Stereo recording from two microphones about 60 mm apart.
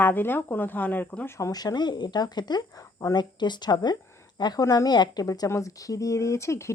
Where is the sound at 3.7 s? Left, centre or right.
Left.